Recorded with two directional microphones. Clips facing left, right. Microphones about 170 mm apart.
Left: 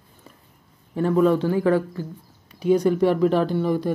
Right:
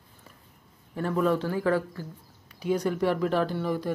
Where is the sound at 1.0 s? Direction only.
20° left (ahead or behind).